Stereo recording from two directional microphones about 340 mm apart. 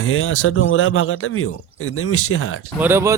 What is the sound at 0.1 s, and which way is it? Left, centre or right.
Speech, left.